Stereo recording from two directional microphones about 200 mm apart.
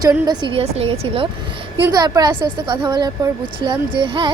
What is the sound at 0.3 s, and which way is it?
A woman's voice, 25° right (ahead or behind).